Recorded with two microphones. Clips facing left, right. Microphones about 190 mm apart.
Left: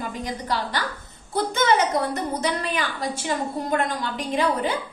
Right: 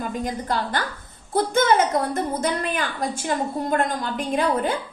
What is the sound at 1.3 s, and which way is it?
Speech, 50° right (ahead or behind).